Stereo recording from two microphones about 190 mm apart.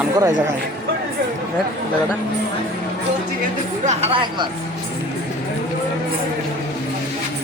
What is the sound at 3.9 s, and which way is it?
Speech, 35° right (ahead or behind).